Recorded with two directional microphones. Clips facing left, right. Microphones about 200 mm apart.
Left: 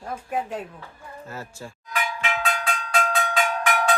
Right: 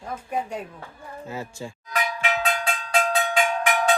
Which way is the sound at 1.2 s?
15° right (ahead or behind).